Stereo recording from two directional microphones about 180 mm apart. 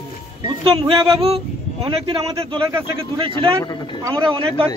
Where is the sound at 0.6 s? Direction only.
30° right (ahead or behind).